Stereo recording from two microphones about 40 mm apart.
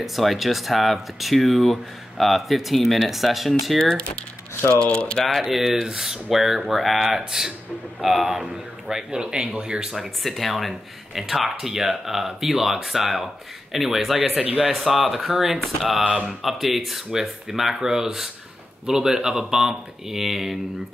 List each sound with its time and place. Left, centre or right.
0.0 s speech: centre
4.7 s speech: left
5.5 s speech: centre
9.2 s speech: right
9.9 s speech: centre
16.1 s speech: centre
16.4 s speech: centre